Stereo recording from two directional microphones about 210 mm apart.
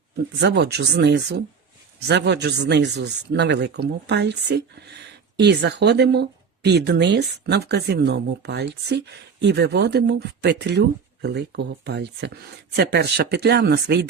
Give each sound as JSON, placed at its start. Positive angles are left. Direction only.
{"t": 0.3, "sound": "a man's voice", "side_deg": -55}